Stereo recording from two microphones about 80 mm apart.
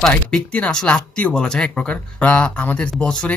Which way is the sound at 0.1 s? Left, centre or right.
Centre.